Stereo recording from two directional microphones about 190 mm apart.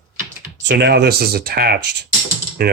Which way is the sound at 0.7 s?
60° right (ahead or behind).